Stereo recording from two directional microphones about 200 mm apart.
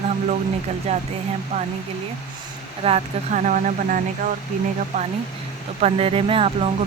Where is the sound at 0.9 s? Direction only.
35° right (ahead or behind).